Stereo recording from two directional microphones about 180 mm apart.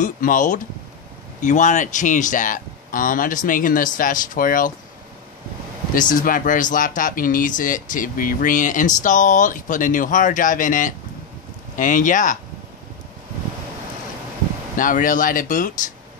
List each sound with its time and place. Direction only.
0.0 s speech: 45° left (ahead or behind)
5.9 s speech: 45° left (ahead or behind)
14.8 s speech: 50° left (ahead or behind)